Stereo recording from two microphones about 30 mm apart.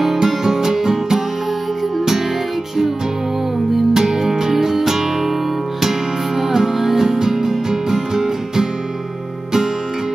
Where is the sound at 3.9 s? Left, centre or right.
Centre.